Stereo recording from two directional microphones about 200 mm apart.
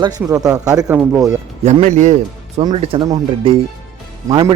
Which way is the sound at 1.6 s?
40° right (ahead or behind).